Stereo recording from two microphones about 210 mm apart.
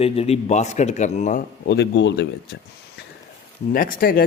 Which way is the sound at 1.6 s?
55° left (ahead or behind).